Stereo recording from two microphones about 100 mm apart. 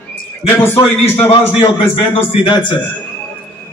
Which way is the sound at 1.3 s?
65° left (ahead or behind).